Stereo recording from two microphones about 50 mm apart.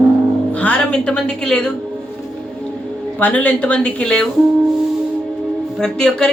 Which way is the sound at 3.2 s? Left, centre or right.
Left.